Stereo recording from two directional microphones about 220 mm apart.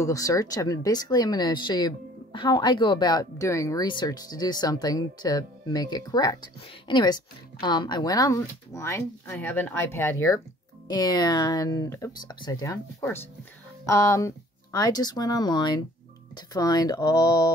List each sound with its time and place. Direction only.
0.0 s speech: 15° left (ahead or behind)